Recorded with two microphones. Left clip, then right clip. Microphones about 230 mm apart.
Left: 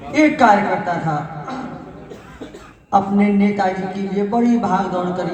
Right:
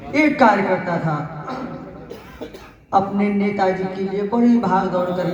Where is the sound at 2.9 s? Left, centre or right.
Left.